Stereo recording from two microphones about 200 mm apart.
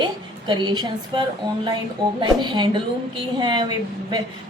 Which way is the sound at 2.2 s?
20° right (ahead or behind).